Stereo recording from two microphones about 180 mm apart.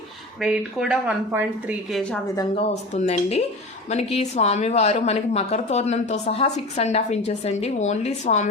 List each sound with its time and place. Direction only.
0.3 s speech: 5° right (ahead or behind)
2.9 s a woman's voice: 35° left (ahead or behind)